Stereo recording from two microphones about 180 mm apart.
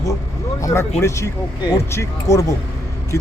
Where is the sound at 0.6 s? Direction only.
15° left (ahead or behind).